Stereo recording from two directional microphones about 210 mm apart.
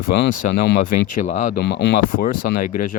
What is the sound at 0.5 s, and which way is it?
Speech, 55° left (ahead or behind).